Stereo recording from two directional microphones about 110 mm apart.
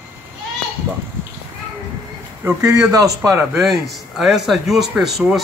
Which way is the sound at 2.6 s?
30° right (ahead or behind).